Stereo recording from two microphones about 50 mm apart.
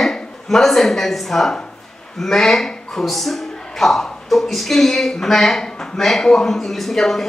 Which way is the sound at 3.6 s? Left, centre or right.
Centre.